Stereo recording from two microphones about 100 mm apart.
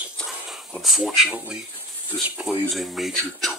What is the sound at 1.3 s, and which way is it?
Speech, 10° right (ahead or behind).